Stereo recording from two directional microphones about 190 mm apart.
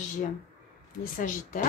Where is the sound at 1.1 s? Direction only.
45° left (ahead or behind).